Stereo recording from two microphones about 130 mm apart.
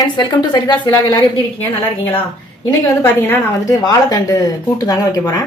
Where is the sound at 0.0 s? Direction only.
35° left (ahead or behind).